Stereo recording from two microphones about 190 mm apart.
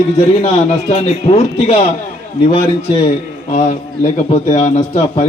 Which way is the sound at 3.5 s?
40° left (ahead or behind).